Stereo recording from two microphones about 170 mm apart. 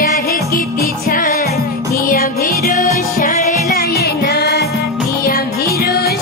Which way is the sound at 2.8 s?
50° left (ahead or behind).